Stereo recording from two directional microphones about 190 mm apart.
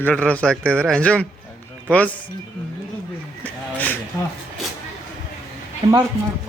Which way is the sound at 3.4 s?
10° left (ahead or behind).